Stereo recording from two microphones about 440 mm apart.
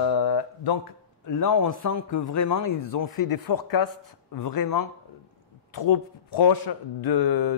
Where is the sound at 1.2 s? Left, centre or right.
Left.